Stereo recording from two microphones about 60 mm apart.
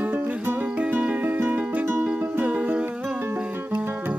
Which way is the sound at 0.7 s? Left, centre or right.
Right.